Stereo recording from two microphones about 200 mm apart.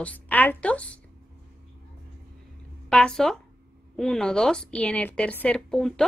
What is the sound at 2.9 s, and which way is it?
A woman's voice, 5° left (ahead or behind).